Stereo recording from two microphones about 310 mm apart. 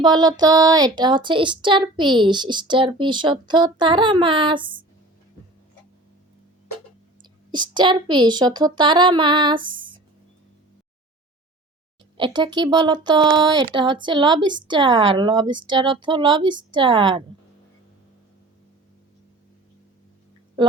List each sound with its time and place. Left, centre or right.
0.0 s speech: centre
7.2 s speech: centre
9.6 s a sound: centre
12.1 s speech: centre